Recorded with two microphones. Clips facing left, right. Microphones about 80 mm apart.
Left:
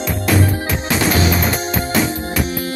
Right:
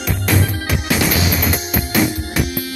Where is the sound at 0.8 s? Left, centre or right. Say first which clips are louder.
Left 2 dB; left.